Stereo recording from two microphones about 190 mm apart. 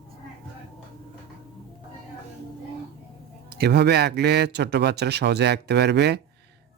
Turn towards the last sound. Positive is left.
turn(degrees=-60)  # may be behind; listen again after turning